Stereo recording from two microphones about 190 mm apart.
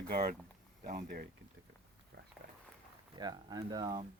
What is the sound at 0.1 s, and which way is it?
Speech, 55° right (ahead or behind).